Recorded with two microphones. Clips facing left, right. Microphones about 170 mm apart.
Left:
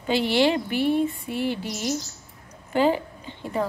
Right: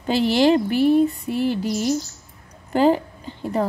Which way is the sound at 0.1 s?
40° right (ahead or behind).